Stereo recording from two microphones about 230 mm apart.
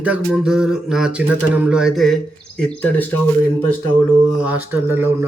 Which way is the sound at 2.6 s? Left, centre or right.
Centre.